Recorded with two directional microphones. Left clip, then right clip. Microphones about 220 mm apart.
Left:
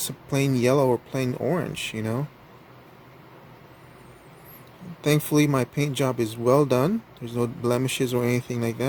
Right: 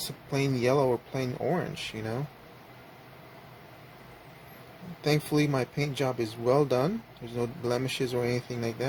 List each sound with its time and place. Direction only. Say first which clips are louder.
0.3 s speech: left 5 dB; 40° left (ahead or behind)
5.0 s speech: left 5 dB; 40° left (ahead or behind)